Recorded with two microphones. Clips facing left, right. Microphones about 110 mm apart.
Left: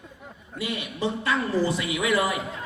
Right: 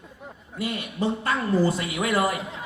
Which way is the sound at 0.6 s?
45° right (ahead or behind).